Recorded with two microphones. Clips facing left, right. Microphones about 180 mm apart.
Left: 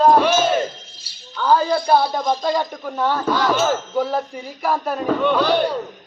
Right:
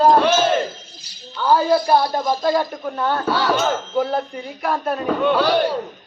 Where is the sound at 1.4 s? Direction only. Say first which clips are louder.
Right 1 dB; 10° right (ahead or behind).